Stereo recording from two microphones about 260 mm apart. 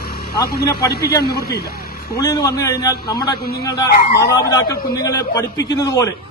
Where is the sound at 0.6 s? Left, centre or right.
Centre.